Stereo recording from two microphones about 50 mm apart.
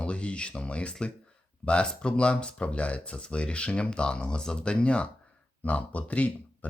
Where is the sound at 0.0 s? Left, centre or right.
Left.